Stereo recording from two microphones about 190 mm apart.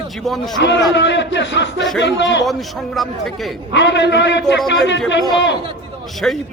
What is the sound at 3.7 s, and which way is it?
Speech, 65° left (ahead or behind).